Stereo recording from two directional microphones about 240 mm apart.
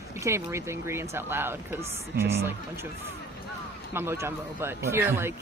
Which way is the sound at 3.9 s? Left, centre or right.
Centre.